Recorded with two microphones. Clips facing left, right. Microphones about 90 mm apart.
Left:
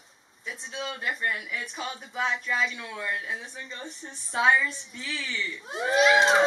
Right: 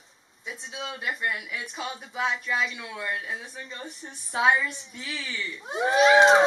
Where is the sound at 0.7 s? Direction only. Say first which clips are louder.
Left 1 dB; 10° right (ahead or behind).